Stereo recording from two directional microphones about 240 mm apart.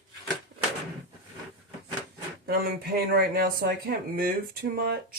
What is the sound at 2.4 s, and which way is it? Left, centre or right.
Speech, right.